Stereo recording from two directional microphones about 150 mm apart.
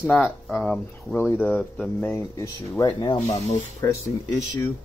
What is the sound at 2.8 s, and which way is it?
Speech, 30° left (ahead or behind).